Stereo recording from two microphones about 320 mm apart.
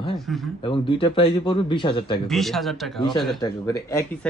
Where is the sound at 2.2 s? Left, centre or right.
Centre.